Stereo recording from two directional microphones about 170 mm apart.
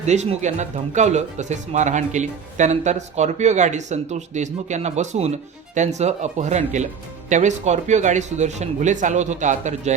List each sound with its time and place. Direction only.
0.0 s speech: 40° right (ahead or behind)